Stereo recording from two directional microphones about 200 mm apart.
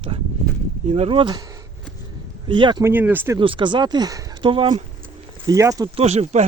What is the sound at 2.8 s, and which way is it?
Speech, 10° right (ahead or behind).